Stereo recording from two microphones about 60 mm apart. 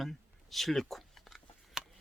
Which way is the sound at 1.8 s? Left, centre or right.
Centre.